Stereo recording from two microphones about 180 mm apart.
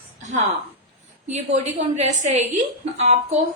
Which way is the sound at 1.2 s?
40° right (ahead or behind).